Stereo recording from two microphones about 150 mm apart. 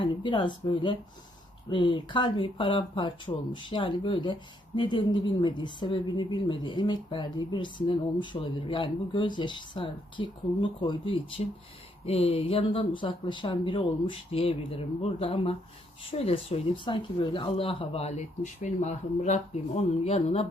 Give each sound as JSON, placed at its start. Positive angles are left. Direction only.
{"t": 0.0, "sound": "speech", "side_deg": 35}
{"t": 18.8, "sound": "speech", "side_deg": 55}